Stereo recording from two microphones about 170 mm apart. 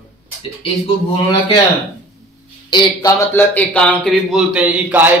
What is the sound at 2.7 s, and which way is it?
Speech, 20° left (ahead or behind).